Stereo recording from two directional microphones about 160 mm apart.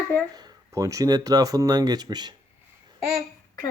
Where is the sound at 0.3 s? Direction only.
20° right (ahead or behind).